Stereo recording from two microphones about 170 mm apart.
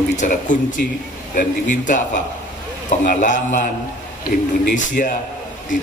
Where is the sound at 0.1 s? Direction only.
45° left (ahead or behind).